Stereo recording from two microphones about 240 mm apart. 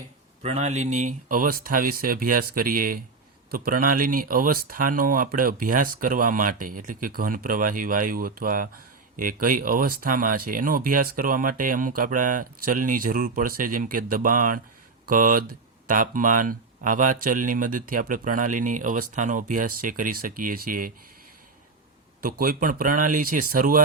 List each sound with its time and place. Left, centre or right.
0.4 s speech: right
22.4 s speech: right